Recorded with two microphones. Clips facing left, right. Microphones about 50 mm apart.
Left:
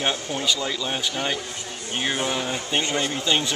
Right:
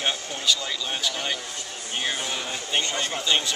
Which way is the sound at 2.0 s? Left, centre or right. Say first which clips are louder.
Left 4 dB; centre.